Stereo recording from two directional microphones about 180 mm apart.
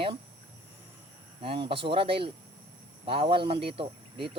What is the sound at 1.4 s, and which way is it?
Speech, 30° right (ahead or behind).